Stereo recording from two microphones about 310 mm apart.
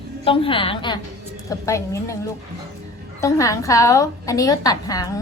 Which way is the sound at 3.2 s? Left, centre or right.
Centre.